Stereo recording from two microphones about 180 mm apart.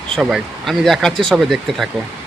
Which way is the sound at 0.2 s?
Centre (ahead or behind).